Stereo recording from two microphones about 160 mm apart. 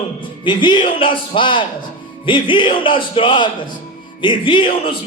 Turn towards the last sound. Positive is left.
turn(degrees=35)  # may be behind; listen again after turning